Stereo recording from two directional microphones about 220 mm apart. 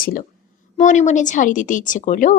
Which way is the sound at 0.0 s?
40° left (ahead or behind).